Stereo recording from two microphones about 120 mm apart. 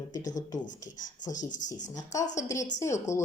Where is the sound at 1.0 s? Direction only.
90° left.